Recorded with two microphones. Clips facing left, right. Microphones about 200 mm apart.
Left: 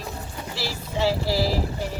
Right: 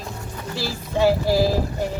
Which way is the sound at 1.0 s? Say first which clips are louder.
Right 5 dB; 50° right (ahead or behind).